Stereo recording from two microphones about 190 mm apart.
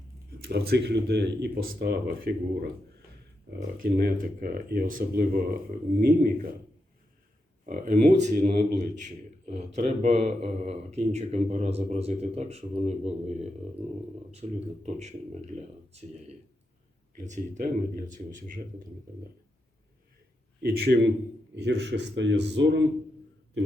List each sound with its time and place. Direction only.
0.3 s speech: 55° right (ahead or behind)
3.8 s speech: 50° right (ahead or behind)
7.6 s a man's voice: 45° right (ahead or behind)
20.6 s a man's voice: 55° right (ahead or behind)